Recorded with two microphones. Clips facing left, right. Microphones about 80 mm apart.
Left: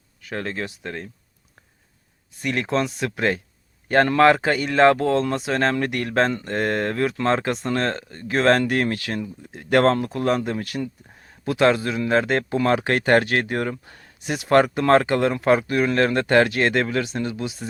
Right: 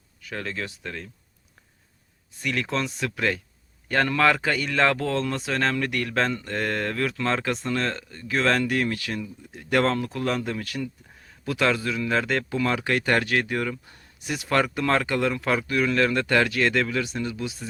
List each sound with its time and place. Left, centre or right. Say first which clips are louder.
0.3 s speech: left 4 dB; left
2.4 s speech: left 4 dB; left
7.7 s speech: left 3 dB; left
13.8 s speech: left 4 dB; left
14.3 s speech: left 4 dB; left
14.5 s speech: left 7 dB; left